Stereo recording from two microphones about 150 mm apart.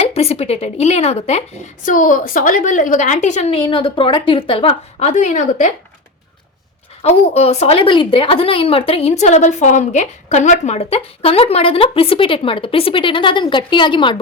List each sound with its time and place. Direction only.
0.0 s a woman's voice: 40° left (ahead or behind)
3.5 s a woman's voice: 35° left (ahead or behind); by 5.7 s 55° left (ahead or behind)
7.0 s a woman's voice: 45° left (ahead or behind)